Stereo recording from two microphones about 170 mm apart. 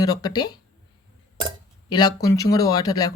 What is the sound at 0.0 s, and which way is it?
Speech, 25° left (ahead or behind).